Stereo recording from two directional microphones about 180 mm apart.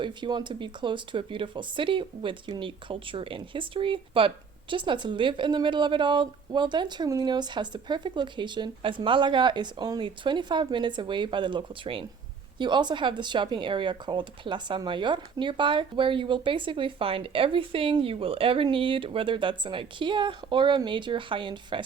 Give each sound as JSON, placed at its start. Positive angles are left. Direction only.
{"t": 0.0, "sound": "speech", "side_deg": -25}